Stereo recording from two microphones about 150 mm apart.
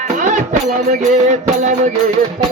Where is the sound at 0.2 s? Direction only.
55° right (ahead or behind).